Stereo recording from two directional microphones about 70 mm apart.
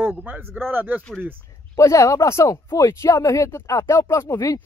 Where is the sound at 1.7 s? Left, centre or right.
Left.